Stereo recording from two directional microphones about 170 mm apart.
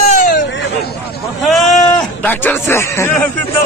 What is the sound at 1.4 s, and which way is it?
Speech, centre (ahead or behind).